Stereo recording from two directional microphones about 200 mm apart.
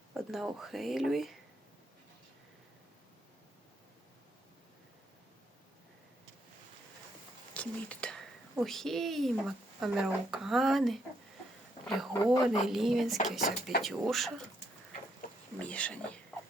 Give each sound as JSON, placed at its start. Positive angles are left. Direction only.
{"t": 0.1, "sound": "speech", "side_deg": 0}
{"t": 7.5, "sound": "speech", "side_deg": 5}
{"t": 12.1, "sound": "speech", "side_deg": 20}
{"t": 12.6, "sound": "speech", "side_deg": 0}
{"t": 15.5, "sound": "speech", "side_deg": 5}